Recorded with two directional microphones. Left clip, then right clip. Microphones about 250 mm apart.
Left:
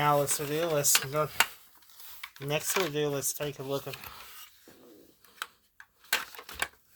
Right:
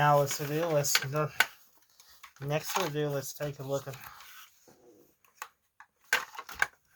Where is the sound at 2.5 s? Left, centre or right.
Left.